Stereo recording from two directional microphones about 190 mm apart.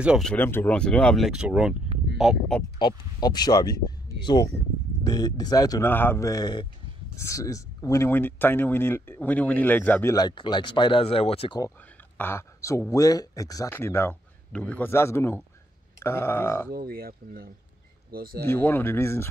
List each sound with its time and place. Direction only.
0.0 s speech: 5° right (ahead or behind)
0.3 s speech: 10° left (ahead or behind)
2.8 s speech: 20° left (ahead or behind)
10.1 s speech: 20° left (ahead or behind)
12.2 s speech: 15° left (ahead or behind)
16.7 s speech: 50° right (ahead or behind)
18.4 s speech: 10° left (ahead or behind)